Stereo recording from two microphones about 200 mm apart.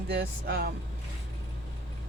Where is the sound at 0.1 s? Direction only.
55° right (ahead or behind).